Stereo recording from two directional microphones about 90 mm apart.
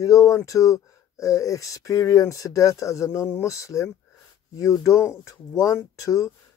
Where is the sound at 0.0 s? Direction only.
35° left (ahead or behind).